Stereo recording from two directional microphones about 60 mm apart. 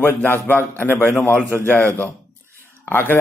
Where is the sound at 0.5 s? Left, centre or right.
Left.